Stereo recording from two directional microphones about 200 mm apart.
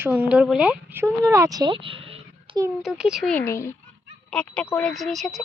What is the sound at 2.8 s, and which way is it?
Speech, 5° right (ahead or behind).